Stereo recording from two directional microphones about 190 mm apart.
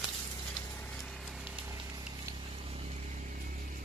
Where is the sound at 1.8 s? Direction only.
20° right (ahead or behind).